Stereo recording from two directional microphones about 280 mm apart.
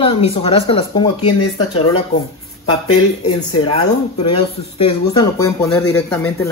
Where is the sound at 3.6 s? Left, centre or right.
Centre.